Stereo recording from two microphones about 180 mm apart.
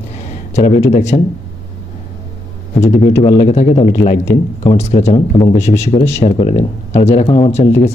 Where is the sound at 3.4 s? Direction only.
40° left (ahead or behind).